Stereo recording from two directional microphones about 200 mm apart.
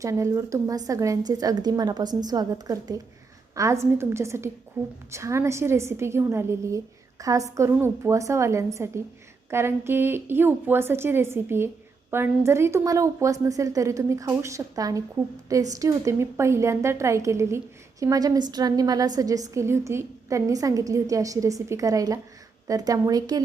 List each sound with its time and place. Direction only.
0.0 s a woman's voice: 15° right (ahead or behind)